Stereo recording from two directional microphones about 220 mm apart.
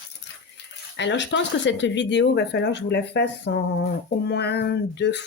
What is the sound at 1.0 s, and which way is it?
Speech, 55° left (ahead or behind).